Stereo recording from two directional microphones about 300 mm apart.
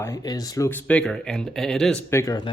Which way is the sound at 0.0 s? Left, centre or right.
Centre.